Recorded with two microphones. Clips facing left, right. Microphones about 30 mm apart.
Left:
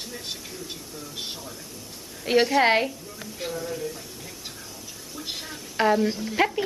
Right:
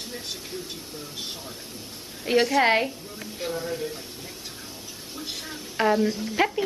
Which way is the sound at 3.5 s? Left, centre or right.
Right.